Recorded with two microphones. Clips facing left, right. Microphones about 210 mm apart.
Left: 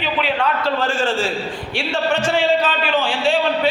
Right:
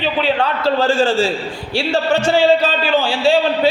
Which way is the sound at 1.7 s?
35° right (ahead or behind).